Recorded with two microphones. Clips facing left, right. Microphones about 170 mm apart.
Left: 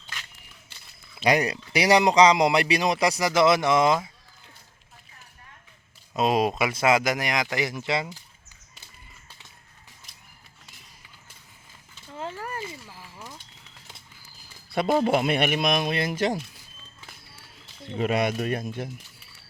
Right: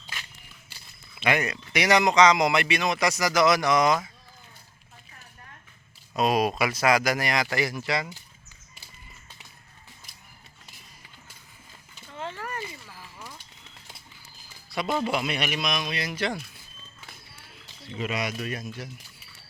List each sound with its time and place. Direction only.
1.2 s a man's voice: 35° left (ahead or behind)
6.1 s speech: 25° left (ahead or behind)
14.7 s a man's voice: 55° left (ahead or behind)
17.8 s a man's voice: 50° left (ahead or behind)